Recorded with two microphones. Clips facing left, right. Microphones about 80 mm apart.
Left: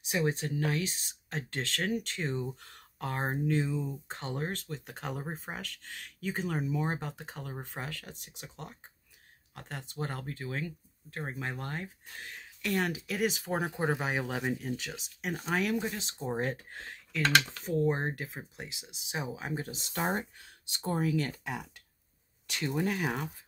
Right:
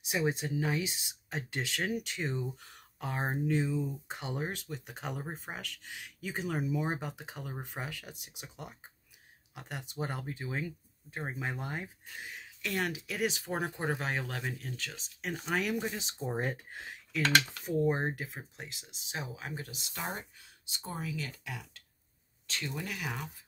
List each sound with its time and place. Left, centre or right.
0.3 s speech: centre
12.4 s speech: centre; by 19.9 s left
19.9 s speech: left
20.2 s speech: left
21.5 s speech: left
22.8 s speech: left